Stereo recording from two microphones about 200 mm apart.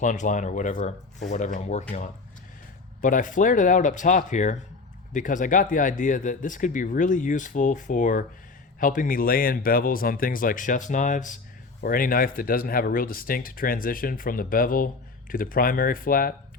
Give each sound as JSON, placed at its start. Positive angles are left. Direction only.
{"t": 0.0, "sound": "speech", "side_deg": 40}
{"t": 3.0, "sound": "speech", "side_deg": 40}